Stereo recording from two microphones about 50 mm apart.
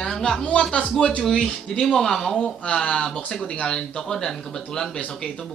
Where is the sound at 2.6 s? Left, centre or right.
Left.